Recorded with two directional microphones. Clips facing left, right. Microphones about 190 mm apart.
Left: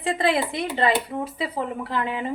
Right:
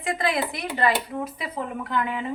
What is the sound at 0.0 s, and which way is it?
Speech, 30° left (ahead or behind).